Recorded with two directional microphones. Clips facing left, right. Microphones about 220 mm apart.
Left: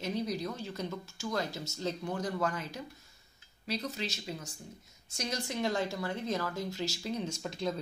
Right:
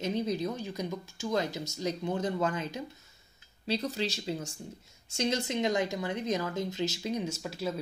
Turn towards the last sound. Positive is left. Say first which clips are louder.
# right 1 dB
turn(degrees=-5)  # may be behind; listen again after turning